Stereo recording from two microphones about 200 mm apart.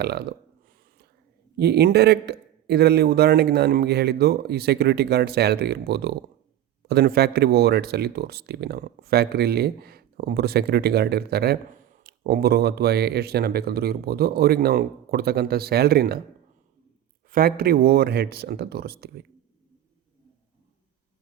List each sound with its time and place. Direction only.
0.0 s speech: 55° right (ahead or behind)
1.5 s speech: 55° right (ahead or behind)
17.3 s speech: 50° right (ahead or behind)